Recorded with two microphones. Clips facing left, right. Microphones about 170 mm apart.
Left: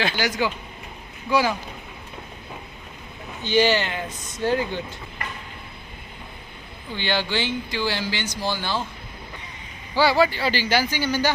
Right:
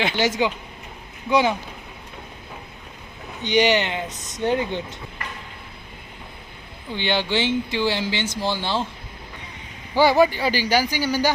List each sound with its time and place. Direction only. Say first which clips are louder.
0.0 s speech: right 3 dB; 25° right (ahead or behind)
3.4 s speech: right 1 dB; 20° right (ahead or behind)
4.1 s speech: even; centre (ahead or behind)
4.4 s speech: right 1 dB; 20° right (ahead or behind)
6.9 s speech: right 2 dB; 20° right (ahead or behind)
9.9 s speech: right 3 dB; 20° right (ahead or behind)